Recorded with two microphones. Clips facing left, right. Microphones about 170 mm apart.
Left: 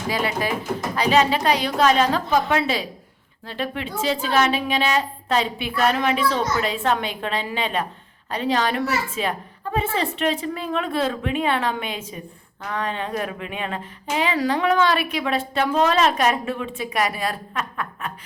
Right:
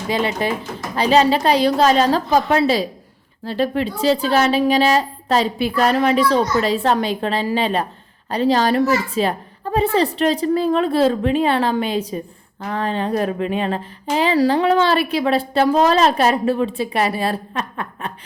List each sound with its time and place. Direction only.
0.1 s speech: 25° right (ahead or behind)